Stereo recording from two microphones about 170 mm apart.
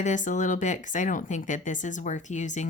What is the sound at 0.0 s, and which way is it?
Speech, 45° left (ahead or behind).